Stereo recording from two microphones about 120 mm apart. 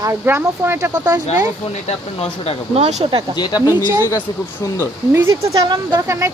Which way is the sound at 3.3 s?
35° left (ahead or behind).